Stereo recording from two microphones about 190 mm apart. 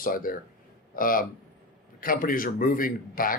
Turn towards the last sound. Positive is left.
turn(degrees=50)  # may be behind; listen again after turning